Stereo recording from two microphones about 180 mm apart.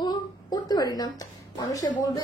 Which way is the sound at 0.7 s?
20° left (ahead or behind).